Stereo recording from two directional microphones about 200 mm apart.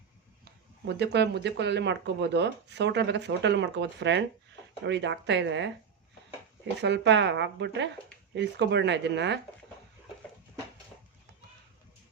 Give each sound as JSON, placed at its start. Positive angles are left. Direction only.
{"t": 0.9, "sound": "speech", "side_deg": -55}
{"t": 6.8, "sound": "speech", "side_deg": -60}